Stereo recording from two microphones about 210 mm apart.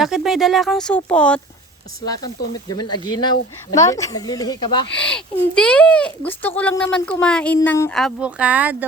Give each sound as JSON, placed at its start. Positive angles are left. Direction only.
{"t": 0.0, "sound": "speech", "side_deg": 0}
{"t": 2.0, "sound": "speech", "side_deg": 15}
{"t": 5.0, "sound": "speech", "side_deg": 5}